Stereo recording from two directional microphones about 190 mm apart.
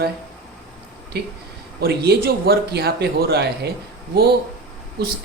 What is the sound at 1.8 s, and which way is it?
Speech, 55° right (ahead or behind).